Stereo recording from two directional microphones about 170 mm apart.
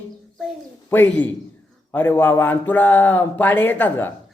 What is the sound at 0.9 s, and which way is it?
Speech, 10° left (ahead or behind).